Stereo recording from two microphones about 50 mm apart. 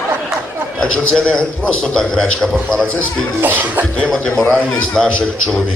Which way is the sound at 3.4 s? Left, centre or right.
Right.